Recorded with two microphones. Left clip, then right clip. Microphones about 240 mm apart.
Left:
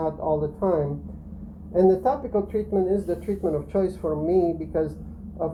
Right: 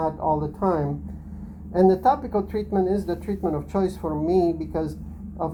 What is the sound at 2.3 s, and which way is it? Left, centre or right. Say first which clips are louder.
Speech: left 1 dB; right.